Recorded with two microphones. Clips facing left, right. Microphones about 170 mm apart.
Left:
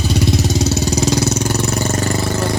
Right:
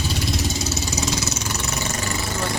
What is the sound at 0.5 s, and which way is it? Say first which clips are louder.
Vehicle: left 9 dB; 65° left (ahead or behind).